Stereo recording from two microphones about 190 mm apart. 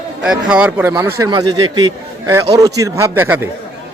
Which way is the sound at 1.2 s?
25° right (ahead or behind).